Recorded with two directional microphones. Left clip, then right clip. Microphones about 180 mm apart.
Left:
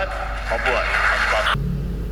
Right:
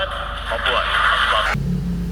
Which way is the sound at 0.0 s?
40° left (ahead or behind).